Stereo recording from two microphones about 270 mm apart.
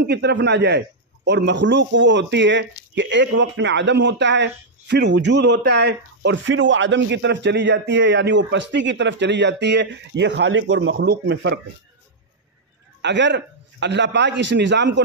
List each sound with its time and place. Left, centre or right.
0.0 s a man's voice: right
13.0 s a man's voice: right